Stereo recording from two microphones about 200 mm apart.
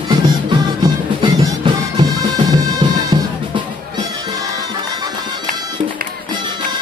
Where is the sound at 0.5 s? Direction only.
20° right (ahead or behind).